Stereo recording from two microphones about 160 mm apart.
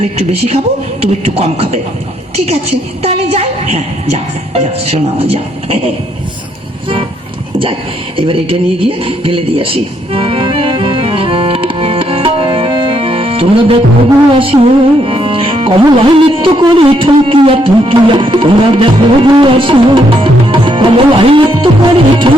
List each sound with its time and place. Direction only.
0.2 s music: 40° right (ahead or behind)
7.6 s a sound: 35° right (ahead or behind)
14.3 s music: 35° right (ahead or behind)